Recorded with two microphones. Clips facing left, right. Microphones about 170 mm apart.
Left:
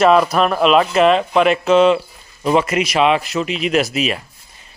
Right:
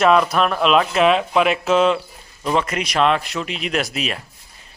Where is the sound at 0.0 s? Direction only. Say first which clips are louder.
Left 3 dB; centre (ahead or behind).